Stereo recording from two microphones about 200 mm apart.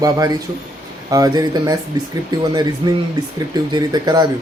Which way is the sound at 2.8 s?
20° right (ahead or behind).